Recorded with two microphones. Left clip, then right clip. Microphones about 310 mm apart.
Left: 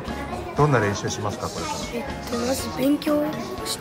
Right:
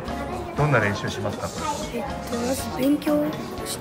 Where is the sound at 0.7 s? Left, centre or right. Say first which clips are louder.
Even; centre.